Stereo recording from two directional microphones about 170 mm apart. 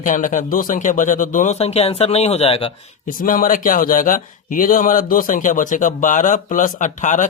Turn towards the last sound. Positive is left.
turn(degrees=45)  # may be behind; listen again after turning